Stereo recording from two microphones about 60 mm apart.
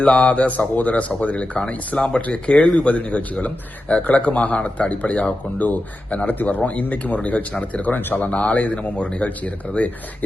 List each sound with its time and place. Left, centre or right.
0.0 s a man's voice: centre